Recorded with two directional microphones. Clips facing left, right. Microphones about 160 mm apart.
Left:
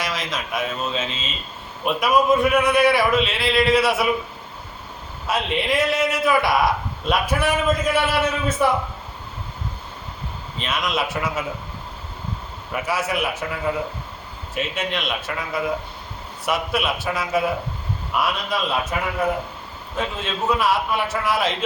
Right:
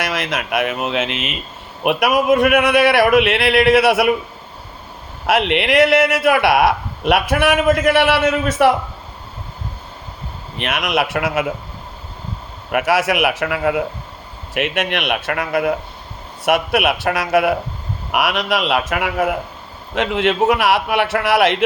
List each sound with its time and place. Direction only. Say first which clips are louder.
0.0 s a man's voice: right 5 dB; 65° right (ahead or behind)
5.2 s a man's voice: right 7 dB; 75° right (ahead or behind); by 8.7 s 90° right
10.6 s a man's voice: right 5 dB; 70° right (ahead or behind)
12.7 s a man's voice: right 7 dB; 85° right
20.0 s a man's voice: right 9 dB; 70° right (ahead or behind)